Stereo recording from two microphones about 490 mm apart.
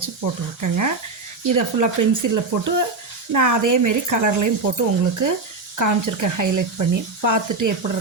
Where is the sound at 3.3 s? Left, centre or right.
Right.